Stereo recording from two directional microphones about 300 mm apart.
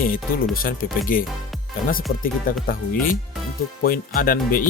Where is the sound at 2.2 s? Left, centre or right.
Left.